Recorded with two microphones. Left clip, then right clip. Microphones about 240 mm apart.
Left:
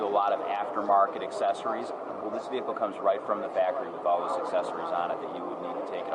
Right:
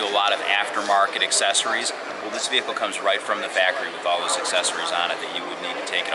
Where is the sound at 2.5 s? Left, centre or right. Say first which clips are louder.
Right 8 dB; centre.